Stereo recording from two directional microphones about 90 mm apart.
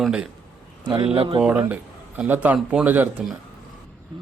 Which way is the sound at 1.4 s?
10° right (ahead or behind).